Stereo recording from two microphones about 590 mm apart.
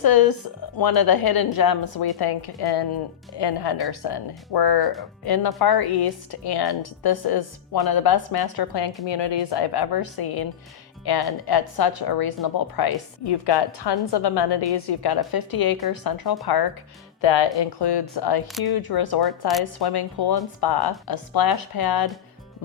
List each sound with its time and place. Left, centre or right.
0.0 s a woman's voice: left
17.2 s a woman's voice: left